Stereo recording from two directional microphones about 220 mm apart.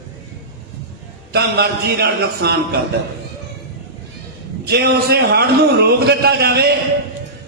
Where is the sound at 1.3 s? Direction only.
45° right (ahead or behind).